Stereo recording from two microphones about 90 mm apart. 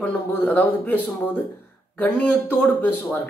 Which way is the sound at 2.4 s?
20° left (ahead or behind).